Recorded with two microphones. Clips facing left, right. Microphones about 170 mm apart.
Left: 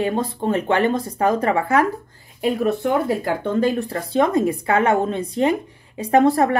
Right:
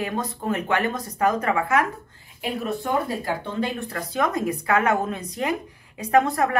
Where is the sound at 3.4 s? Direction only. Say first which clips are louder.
Left 8 dB; 45° left (ahead or behind).